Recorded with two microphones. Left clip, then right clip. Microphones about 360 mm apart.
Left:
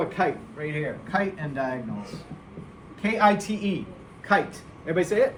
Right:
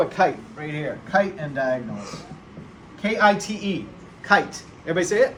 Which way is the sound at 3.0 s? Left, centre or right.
Centre.